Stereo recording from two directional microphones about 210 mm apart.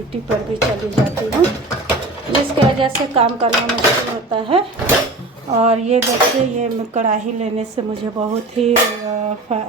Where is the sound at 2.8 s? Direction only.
25° right (ahead or behind).